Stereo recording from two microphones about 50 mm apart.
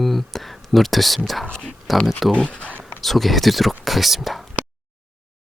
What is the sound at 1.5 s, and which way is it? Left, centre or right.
Speech, centre.